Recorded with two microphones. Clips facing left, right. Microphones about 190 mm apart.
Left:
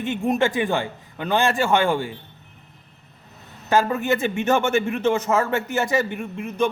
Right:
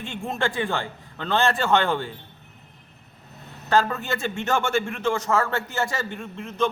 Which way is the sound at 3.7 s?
15° left (ahead or behind).